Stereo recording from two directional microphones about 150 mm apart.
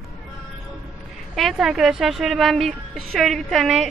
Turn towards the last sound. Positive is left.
turn(degrees=0)  # may be behind; listen again after turning